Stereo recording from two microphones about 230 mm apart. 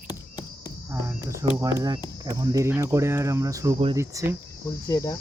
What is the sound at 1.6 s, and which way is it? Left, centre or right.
Speech, centre.